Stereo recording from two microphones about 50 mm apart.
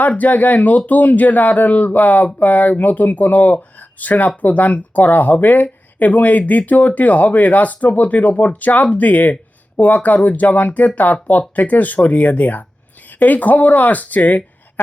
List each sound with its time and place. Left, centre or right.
0.2 s speech: left